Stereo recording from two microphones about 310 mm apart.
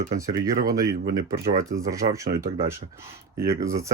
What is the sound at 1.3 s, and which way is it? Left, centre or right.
Speech, right.